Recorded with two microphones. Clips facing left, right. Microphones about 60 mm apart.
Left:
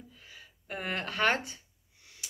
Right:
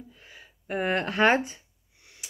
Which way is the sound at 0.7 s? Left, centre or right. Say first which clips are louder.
Right 8 dB; centre.